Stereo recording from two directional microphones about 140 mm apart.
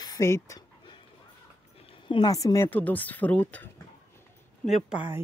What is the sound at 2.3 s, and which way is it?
Speech, 25° left (ahead or behind).